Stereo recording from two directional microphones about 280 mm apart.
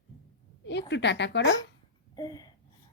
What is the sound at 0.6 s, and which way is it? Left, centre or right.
Speech, left.